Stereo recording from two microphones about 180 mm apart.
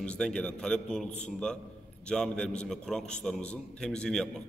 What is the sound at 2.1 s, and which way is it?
A man's voice, 5° left (ahead or behind).